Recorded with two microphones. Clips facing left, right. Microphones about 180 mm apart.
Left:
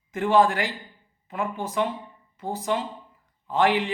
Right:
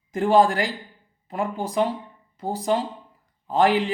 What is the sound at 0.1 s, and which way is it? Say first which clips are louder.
A man's voice: right 2 dB; 35° right (ahead or behind).